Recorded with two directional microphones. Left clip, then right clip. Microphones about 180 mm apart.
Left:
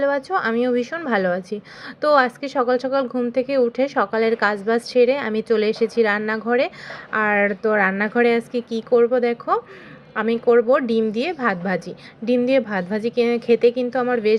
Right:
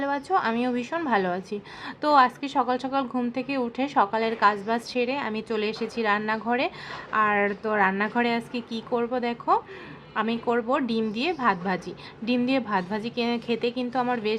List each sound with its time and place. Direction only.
0.0 s a woman's voice: 15° left (ahead or behind)